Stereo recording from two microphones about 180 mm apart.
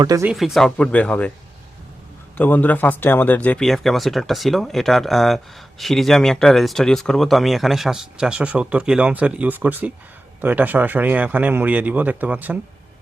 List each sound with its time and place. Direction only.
0.0 s speech: 20° right (ahead or behind)
0.3 s speech: centre (ahead or behind)
2.4 s speech: 10° left (ahead or behind); by 12.5 s 10° right (ahead or behind)